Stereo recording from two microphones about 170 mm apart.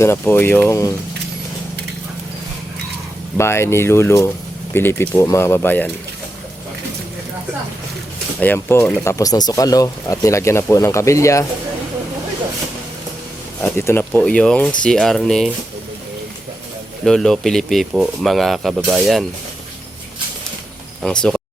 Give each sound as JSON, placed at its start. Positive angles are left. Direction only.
{"t": 0.0, "sound": "speech", "side_deg": 15}
{"t": 3.3, "sound": "speech", "side_deg": 15}
{"t": 8.4, "sound": "speech", "side_deg": 10}
{"t": 13.6, "sound": "speech", "side_deg": 15}
{"t": 17.1, "sound": "speech", "side_deg": 0}
{"t": 21.0, "sound": "speech", "side_deg": 5}